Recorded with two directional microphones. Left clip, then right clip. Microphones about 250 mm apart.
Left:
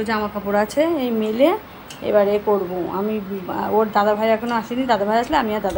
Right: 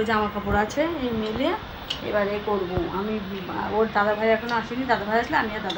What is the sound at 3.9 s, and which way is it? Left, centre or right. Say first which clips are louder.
A woman's voice: left 4 dB; centre.